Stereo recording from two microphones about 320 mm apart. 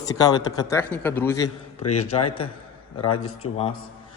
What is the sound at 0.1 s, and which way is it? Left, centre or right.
A man's voice, centre.